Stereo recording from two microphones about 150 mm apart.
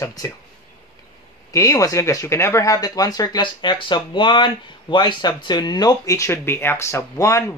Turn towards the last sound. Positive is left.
turn(degrees=20)  # may be behind; listen again after turning